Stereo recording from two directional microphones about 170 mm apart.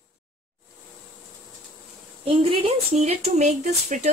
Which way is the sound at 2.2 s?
35° right (ahead or behind).